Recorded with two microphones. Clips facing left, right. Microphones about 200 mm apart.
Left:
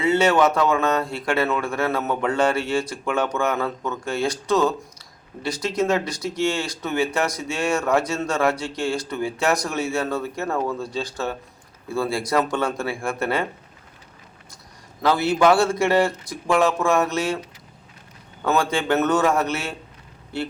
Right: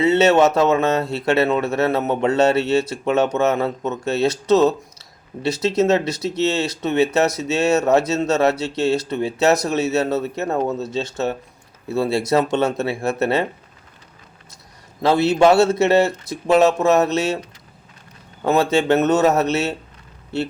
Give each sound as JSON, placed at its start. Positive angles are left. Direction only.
{"t": 0.0, "sound": "speech", "side_deg": -25}
{"t": 15.0, "sound": "speech", "side_deg": -25}
{"t": 18.4, "sound": "speech", "side_deg": -25}